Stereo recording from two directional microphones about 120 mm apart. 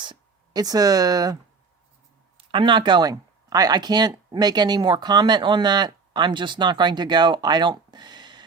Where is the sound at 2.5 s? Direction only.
45° right (ahead or behind).